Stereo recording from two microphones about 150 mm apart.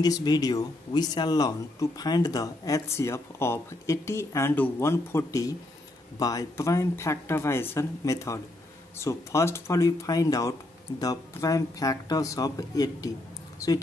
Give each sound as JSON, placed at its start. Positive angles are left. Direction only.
{"t": 0.0, "sound": "speech", "side_deg": 25}